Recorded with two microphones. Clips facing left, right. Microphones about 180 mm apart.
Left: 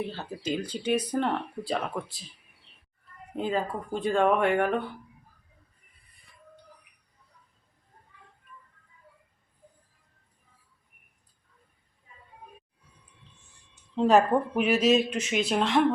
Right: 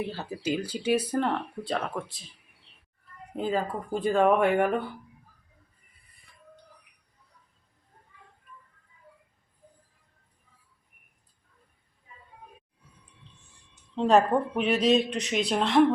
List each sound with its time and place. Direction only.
0.1 s speech: 10° right (ahead or behind)
3.3 s speech: centre (ahead or behind)
13.9 s speech: 5° left (ahead or behind)